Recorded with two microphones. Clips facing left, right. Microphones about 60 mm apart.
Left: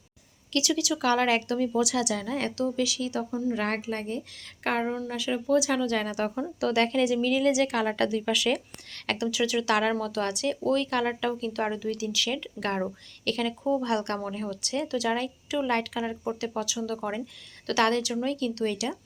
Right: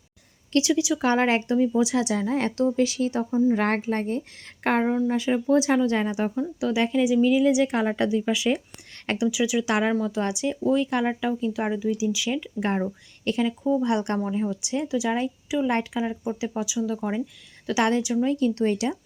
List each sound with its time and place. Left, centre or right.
0.5 s speech: right
6.6 s speech: centre
18.3 s speech: right